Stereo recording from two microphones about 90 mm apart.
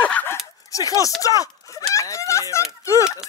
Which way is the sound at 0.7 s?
40° left (ahead or behind).